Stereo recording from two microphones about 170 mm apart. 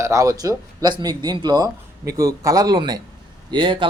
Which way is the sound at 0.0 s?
20° right (ahead or behind).